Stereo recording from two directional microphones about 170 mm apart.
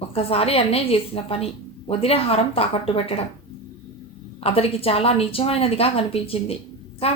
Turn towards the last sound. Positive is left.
turn(degrees=35)  # may be behind; listen again after turning